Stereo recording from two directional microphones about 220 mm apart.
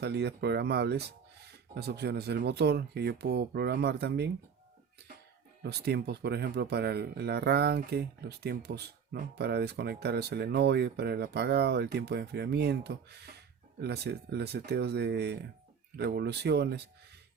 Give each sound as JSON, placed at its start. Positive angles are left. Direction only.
{"t": 0.0, "sound": "speech", "side_deg": -50}
{"t": 5.6, "sound": "speech", "side_deg": -45}